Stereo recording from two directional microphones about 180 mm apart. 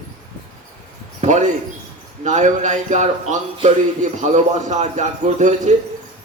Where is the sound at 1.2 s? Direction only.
40° right (ahead or behind).